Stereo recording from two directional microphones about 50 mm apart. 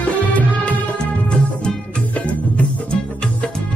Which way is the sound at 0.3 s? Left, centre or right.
Left.